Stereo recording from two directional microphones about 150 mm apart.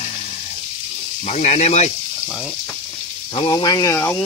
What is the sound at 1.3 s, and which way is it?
Speech, 50° left (ahead or behind).